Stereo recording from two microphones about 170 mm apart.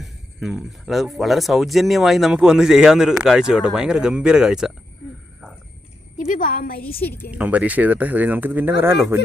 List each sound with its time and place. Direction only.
0.0 s speech: centre (ahead or behind)
6.2 s a woman's voice: 50° left (ahead or behind)
7.3 s speech: 10° right (ahead or behind)